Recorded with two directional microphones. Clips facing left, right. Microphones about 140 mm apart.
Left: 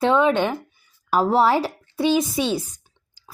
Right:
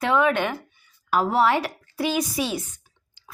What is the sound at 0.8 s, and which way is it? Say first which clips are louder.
A woman's voice: left 2 dB; 40° left (ahead or behind).